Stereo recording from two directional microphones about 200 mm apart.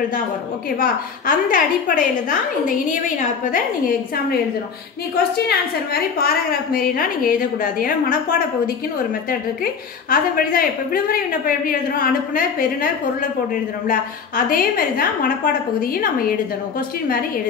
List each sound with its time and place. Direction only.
0.7 s a woman's voice: 45° left (ahead or behind)
5.9 s a woman's voice: 45° left (ahead or behind)
10.0 s a woman's voice: 45° left (ahead or behind)
13.8 s a woman's voice: 45° left (ahead or behind)